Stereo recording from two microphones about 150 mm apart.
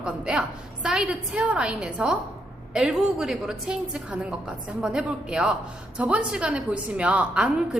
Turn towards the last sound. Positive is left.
turn(degrees=-5)  # may be behind; listen again after turning